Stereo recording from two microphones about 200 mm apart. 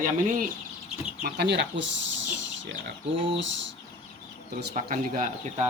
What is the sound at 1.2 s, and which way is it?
Speech, 55° right (ahead or behind).